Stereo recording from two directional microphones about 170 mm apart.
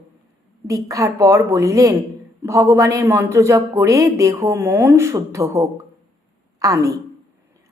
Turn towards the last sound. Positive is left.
turn(degrees=-20)  # may be behind; listen again after turning